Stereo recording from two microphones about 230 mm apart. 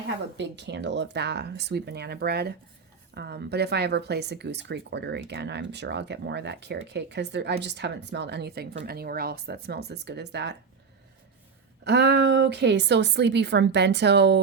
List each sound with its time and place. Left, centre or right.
0.3 s speech: right
11.9 s speech: right